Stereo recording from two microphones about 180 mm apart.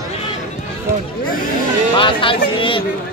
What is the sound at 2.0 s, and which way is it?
Speech, 30° left (ahead or behind).